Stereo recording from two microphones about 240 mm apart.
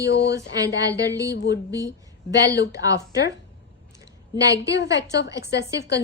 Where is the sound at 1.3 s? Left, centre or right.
Left.